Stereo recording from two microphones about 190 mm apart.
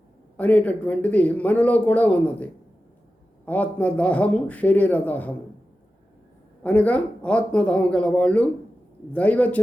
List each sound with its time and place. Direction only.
0.3 s speech: 10° left (ahead or behind)
6.6 s speech: 5° left (ahead or behind)